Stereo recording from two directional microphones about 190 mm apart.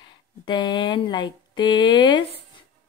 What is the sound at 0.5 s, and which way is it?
Speech, 25° left (ahead or behind).